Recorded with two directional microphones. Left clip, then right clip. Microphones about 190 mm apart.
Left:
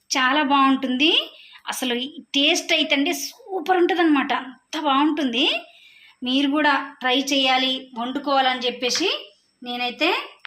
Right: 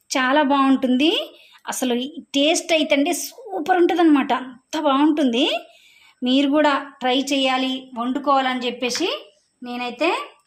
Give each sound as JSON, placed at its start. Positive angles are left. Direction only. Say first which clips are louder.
{"t": 0.1, "sound": "a woman's voice", "louder": "right 1 dB", "side_deg": -60}